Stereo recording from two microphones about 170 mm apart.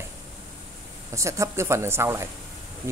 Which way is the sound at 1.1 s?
15° right (ahead or behind).